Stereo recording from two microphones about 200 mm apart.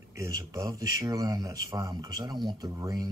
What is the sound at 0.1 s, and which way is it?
Speech, 15° right (ahead or behind).